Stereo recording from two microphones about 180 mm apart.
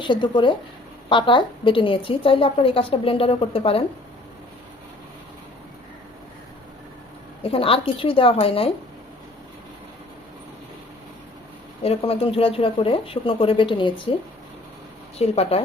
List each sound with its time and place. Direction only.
0.0 s a woman's voice: 25° left (ahead or behind)
7.4 s a woman's voice: 30° left (ahead or behind)
11.8 s a woman's voice: 35° left (ahead or behind)
15.2 s a woman's voice: 35° left (ahead or behind)